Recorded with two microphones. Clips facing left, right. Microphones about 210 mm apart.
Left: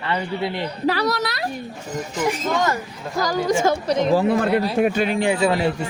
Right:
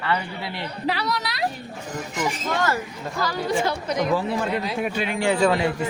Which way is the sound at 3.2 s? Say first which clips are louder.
Left 4 dB; 45° left (ahead or behind).